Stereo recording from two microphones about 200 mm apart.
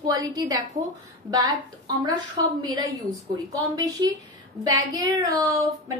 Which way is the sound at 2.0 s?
20° right (ahead or behind).